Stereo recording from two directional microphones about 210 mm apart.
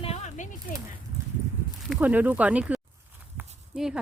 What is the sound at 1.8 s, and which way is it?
Speech, 5° right (ahead or behind).